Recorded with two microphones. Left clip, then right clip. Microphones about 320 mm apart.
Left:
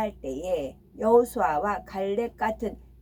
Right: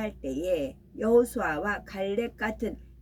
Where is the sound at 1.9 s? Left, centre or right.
Centre.